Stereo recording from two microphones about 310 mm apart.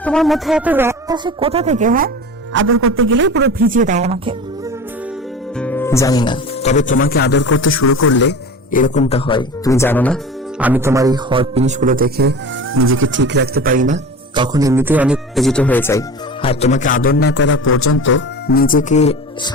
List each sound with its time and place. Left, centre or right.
0.0 s speech: centre
5.5 s speech: centre
10.6 s a man's voice: centre